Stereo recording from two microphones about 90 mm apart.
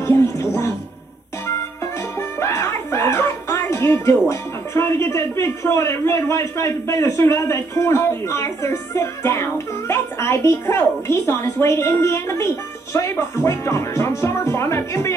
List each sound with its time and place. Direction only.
0.0 s music: 30° left (ahead or behind)
2.4 s speech: 35° left (ahead or behind)